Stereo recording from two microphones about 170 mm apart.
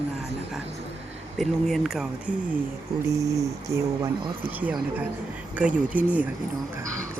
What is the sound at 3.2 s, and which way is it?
Speech, 20° right (ahead or behind).